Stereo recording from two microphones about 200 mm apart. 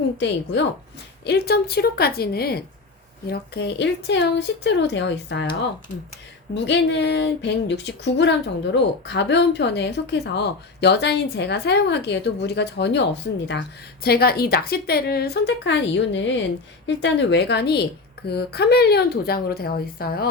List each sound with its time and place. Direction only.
0.2 s a woman's voice: 60° left (ahead or behind)